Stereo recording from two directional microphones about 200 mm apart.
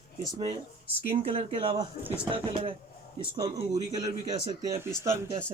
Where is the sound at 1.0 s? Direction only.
30° right (ahead or behind).